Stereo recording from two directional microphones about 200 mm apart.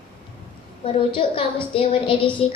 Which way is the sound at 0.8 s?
25° left (ahead or behind).